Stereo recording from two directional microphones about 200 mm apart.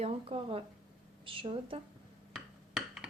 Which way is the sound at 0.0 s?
30° right (ahead or behind).